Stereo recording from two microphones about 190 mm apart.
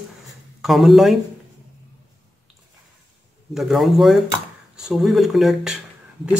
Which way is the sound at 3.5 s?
Centre (ahead or behind).